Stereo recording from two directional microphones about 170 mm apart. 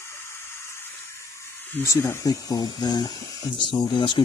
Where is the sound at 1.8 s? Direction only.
20° left (ahead or behind).